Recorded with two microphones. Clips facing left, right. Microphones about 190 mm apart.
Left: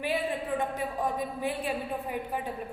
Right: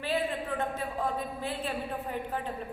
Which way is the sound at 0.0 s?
15° left (ahead or behind).